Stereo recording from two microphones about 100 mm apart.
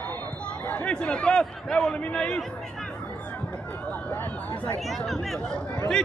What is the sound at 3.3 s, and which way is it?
Speech, 15° left (ahead or behind).